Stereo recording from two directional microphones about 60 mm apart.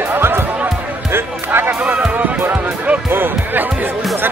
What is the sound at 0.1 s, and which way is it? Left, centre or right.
Music, right.